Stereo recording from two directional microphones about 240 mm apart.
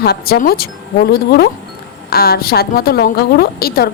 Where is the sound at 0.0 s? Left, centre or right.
Left.